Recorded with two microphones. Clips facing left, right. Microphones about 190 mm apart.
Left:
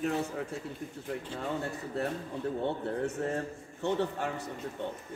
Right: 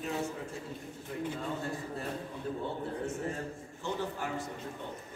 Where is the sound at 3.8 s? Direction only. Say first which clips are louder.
Left 5 dB; 65° left (ahead or behind).